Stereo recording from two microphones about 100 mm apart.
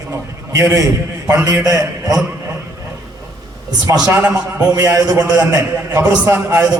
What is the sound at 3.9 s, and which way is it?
A man's voice, 40° right (ahead or behind).